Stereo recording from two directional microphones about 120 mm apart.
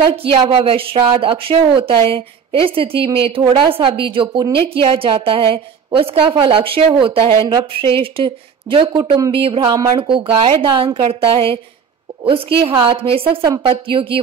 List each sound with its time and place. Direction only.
0.1 s a woman's voice: 45° right (ahead or behind)
9.6 s a woman's voice: 30° right (ahead or behind)
9.9 s a woman's voice: 45° right (ahead or behind)